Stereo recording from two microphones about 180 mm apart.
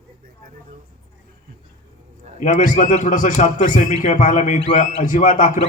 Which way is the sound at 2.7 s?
45° left (ahead or behind).